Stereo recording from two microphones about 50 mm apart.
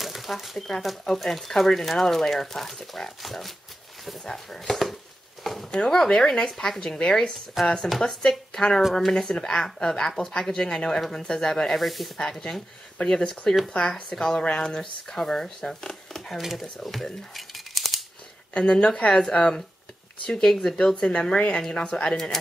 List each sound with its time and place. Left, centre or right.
0.0 s speech: centre
5.4 s a sound: centre
5.7 s speech: centre
12.2 s speech: centre
16.3 s speech: centre
17.7 s scissors: centre
18.5 s speech: centre